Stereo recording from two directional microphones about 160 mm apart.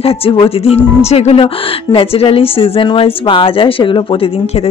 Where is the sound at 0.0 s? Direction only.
35° left (ahead or behind).